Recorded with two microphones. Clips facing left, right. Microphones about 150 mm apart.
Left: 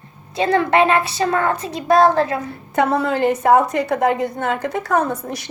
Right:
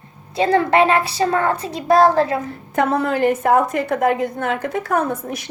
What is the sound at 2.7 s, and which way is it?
A woman's voice, 45° right (ahead or behind).